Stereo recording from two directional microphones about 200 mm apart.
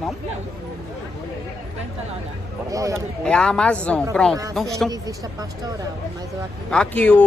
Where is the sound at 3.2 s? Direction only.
5° left (ahead or behind).